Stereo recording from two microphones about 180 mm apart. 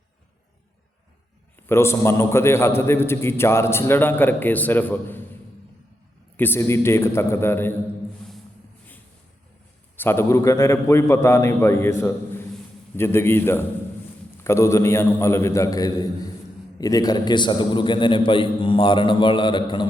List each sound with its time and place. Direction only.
1.6 s a man's voice: 15° left (ahead or behind)
6.3 s a man's voice: 10° left (ahead or behind)
8.2 s music: 5° left (ahead or behind)
10.0 s a man's voice: 15° left (ahead or behind)